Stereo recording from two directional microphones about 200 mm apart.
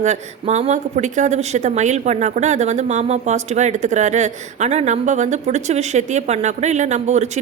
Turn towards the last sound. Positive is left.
turn(degrees=-35)  # may be behind; listen again after turning